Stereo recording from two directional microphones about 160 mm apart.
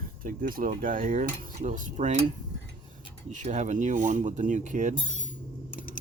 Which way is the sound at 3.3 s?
50° right (ahead or behind).